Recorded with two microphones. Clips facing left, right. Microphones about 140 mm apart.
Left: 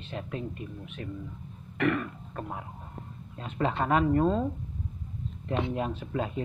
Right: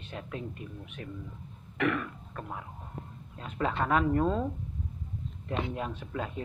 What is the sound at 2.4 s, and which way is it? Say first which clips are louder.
Speech: left 3 dB; 25° left (ahead or behind).